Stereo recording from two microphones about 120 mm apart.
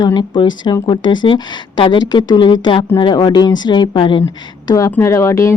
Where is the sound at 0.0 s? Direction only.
35° left (ahead or behind).